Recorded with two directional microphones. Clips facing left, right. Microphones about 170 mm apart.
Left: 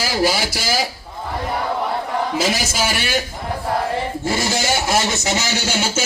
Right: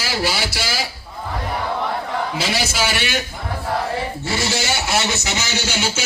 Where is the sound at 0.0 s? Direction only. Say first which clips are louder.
Left 4 dB; 45° left (ahead or behind).